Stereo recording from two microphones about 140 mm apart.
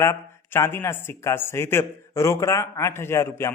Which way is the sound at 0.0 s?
20° left (ahead or behind).